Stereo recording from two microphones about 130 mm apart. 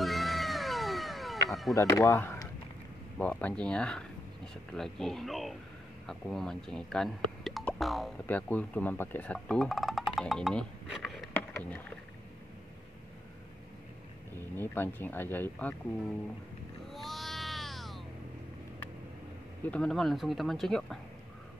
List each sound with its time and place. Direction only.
0.0 s cat: centre (ahead or behind)
1.8 s speech: 25° left (ahead or behind); by 8.1 s centre (ahead or behind)
8.3 s speech: 10° left (ahead or behind)
11.3 s a sound: 15° left (ahead or behind)
14.3 s speech: 15° left (ahead or behind)
16.9 s a sound: centre (ahead or behind)
19.7 s speech: 5° left (ahead or behind)